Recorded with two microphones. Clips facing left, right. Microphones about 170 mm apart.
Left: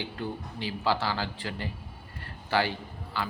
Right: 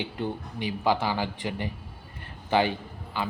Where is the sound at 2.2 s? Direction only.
20° right (ahead or behind).